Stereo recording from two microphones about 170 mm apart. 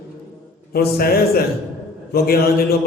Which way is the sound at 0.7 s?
65° left (ahead or behind).